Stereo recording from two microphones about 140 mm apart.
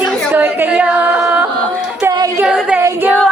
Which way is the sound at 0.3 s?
15° right (ahead or behind).